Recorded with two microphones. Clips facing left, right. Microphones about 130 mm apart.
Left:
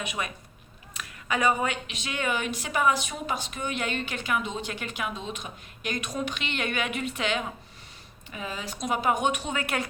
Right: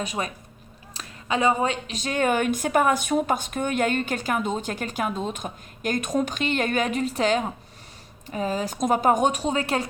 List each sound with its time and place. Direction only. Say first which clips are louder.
0.0 s a woman's voice: right 4 dB; 35° right (ahead or behind)